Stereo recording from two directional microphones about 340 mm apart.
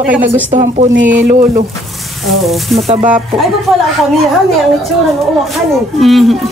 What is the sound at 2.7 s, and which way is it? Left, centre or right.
Speech, centre.